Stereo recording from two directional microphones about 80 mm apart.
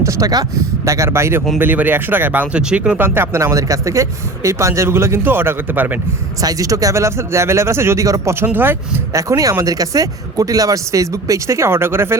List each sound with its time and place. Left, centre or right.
0.0 s speech: right
1.5 s speech: right
3.0 s speech: right
6.4 s speech: right
8.4 s speech: right
9.1 s speech: right